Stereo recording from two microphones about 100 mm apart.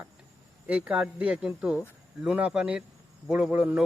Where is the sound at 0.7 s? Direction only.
10° right (ahead or behind).